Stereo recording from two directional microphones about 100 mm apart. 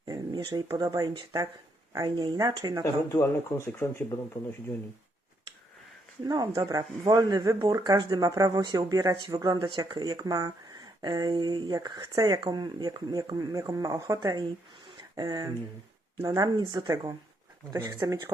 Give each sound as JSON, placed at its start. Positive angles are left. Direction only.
{"t": 0.1, "sound": "speech", "side_deg": -40}
{"t": 1.1, "sound": "speech", "side_deg": -55}
{"t": 1.9, "sound": "speech", "side_deg": -40}
{"t": 2.8, "sound": "speech", "side_deg": 25}
{"t": 6.2, "sound": "speech", "side_deg": -40}
{"t": 9.6, "sound": "speech", "side_deg": -50}
{"t": 14.2, "sound": "speech", "side_deg": -45}